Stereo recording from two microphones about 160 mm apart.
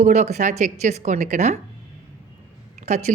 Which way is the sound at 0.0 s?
45° right (ahead or behind).